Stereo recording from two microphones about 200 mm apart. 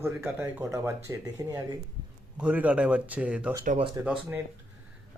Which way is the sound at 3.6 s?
40° right (ahead or behind).